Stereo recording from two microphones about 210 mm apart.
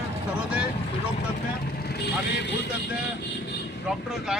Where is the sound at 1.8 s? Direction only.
50° left (ahead or behind).